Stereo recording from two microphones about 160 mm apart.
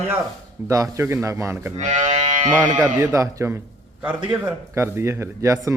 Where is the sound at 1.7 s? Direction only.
45° right (ahead or behind).